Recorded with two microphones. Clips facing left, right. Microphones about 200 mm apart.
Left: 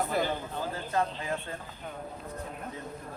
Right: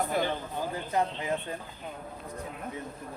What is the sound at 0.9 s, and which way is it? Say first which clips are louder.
Speech: right 2 dB; 20° right (ahead or behind).